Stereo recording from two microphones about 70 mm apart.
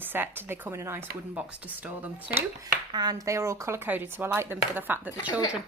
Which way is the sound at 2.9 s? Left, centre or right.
Right.